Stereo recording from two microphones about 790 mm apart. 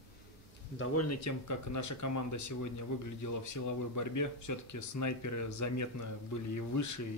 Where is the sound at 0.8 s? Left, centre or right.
Centre.